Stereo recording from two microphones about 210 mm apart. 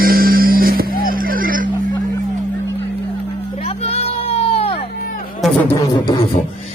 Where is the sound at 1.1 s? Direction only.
40° right (ahead or behind).